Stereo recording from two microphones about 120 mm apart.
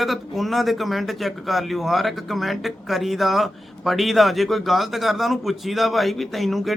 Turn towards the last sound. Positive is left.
turn(degrees=0)  # may be behind; listen again after turning